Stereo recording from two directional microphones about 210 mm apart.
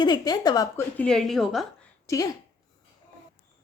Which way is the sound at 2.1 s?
15° left (ahead or behind).